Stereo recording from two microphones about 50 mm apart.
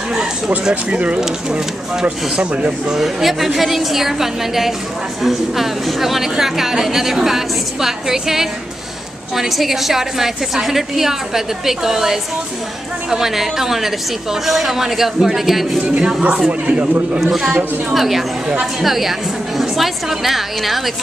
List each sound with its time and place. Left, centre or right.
0.7 s speech: right
3.0 s a woman's voice: centre
16.0 s a woman's voice: centre
17.2 s a woman's voice: centre
18.5 s a woman's voice: centre
18.9 s a woman's voice: centre